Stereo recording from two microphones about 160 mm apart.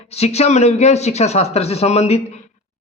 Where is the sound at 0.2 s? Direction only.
40° left (ahead or behind).